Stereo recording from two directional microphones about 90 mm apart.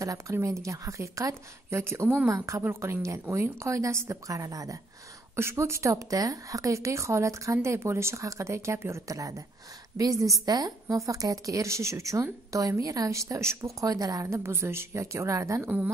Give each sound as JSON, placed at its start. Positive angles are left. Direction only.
{"t": 0.0, "sound": "a woman's voice", "side_deg": -35}
{"t": 5.3, "sound": "a woman's voice", "side_deg": -30}
{"t": 13.7, "sound": "a woman's voice", "side_deg": -40}